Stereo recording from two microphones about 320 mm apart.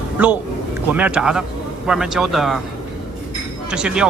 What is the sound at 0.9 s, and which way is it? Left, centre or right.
Speech, centre.